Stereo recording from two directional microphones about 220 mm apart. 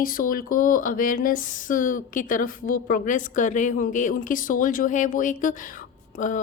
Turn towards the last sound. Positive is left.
turn(degrees=35)  # may be behind; listen again after turning